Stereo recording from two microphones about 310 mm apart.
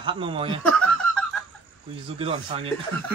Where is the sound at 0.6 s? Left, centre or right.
Centre.